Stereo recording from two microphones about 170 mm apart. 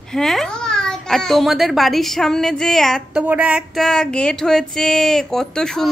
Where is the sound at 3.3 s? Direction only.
10° right (ahead or behind).